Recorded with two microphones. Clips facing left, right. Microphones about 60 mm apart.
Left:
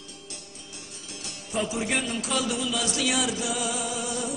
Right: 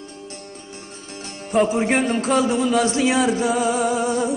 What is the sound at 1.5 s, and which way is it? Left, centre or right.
A man's voice, right.